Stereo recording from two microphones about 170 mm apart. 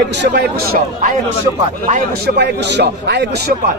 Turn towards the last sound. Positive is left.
turn(degrees=-85)